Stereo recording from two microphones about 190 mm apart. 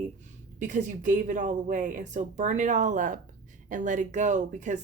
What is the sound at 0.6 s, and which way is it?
Speech, 40° right (ahead or behind).